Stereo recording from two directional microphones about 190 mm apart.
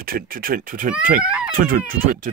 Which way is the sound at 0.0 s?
50° right (ahead or behind).